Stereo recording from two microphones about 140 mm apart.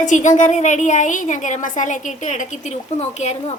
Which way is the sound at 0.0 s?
65° left (ahead or behind).